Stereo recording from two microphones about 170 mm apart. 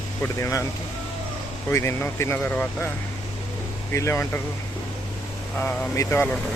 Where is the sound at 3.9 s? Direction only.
15° left (ahead or behind).